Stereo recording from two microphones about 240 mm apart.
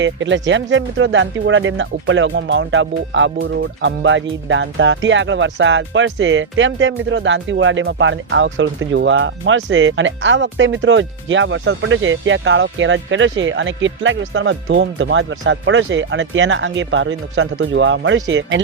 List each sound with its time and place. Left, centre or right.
0.0 s speech: right